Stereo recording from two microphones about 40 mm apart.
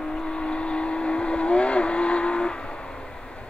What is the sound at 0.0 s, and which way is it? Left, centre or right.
Vehicle, centre.